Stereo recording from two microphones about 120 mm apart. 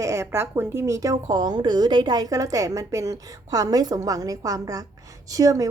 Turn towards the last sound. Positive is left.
turn(degrees=-30)  # may be behind; listen again after turning